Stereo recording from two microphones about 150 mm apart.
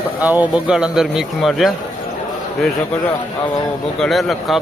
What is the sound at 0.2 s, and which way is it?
A man's voice, 10° right (ahead or behind).